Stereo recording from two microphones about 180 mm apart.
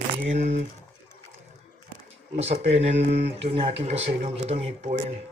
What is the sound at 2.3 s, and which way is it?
Speech, 35° right (ahead or behind).